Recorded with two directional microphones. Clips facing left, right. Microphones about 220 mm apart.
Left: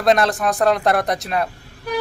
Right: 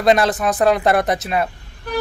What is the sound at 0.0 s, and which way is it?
Speech, centre (ahead or behind).